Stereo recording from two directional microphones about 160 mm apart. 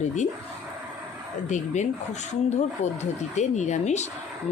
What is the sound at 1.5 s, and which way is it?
Speech, 45° left (ahead or behind).